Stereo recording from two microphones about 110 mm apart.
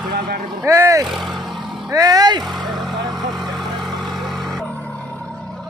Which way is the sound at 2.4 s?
Centre (ahead or behind).